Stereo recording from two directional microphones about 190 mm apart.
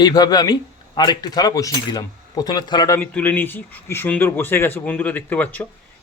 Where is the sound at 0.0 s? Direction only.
20° left (ahead or behind).